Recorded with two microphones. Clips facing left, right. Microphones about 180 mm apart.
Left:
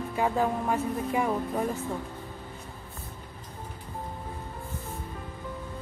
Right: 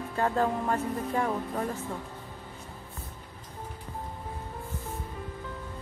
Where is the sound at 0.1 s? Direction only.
10° left (ahead or behind).